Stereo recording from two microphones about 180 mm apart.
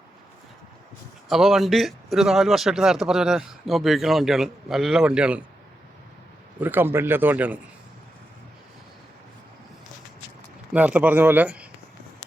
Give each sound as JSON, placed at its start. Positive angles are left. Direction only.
{"t": 1.3, "sound": "speech", "side_deg": 0}
{"t": 6.6, "sound": "speech", "side_deg": -10}
{"t": 10.7, "sound": "speech", "side_deg": -10}